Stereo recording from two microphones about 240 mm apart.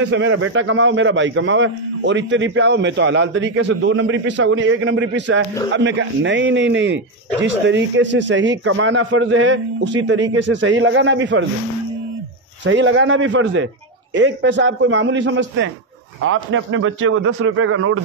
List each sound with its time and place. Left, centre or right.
0.0 s a man's voice: right
12.6 s a man's voice: right